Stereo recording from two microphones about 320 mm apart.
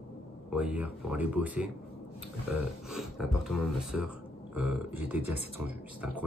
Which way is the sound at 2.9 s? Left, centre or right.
Centre.